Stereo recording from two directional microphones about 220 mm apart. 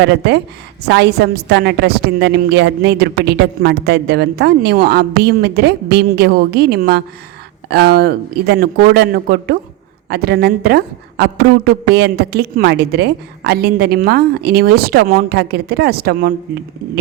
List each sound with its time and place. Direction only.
0.0 s a woman's voice: 50° right (ahead or behind)